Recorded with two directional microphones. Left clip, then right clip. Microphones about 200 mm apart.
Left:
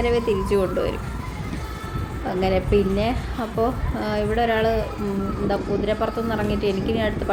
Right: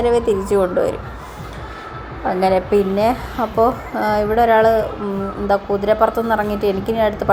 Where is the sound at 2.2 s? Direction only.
5° left (ahead or behind).